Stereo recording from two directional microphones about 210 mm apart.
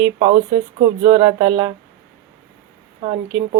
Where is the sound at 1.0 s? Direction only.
30° right (ahead or behind).